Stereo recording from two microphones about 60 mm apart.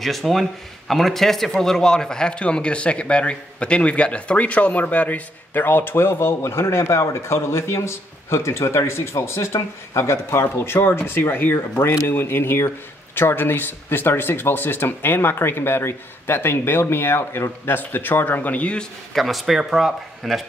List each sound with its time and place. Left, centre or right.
0.0 s a man's voice: centre; by 18.9 s left
19.1 s speech: centre